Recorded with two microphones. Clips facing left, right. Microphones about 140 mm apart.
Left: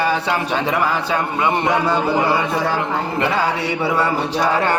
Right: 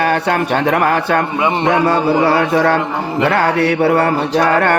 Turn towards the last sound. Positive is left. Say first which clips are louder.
# right 5 dB
turn(degrees=-60)  # may be behind; listen again after turning